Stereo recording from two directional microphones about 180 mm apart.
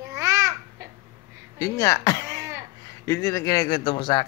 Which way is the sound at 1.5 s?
20° left (ahead or behind).